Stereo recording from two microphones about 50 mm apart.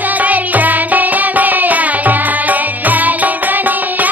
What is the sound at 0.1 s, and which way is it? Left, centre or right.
Music, right.